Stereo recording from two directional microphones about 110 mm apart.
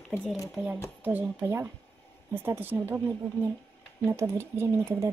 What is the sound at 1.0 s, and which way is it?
Speech, 15° right (ahead or behind).